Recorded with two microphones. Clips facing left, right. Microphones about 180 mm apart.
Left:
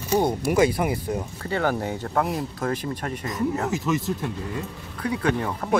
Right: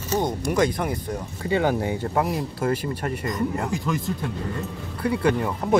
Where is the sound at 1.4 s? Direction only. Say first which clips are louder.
Right 3 dB; 15° right (ahead or behind); by 4.1 s centre (ahead or behind).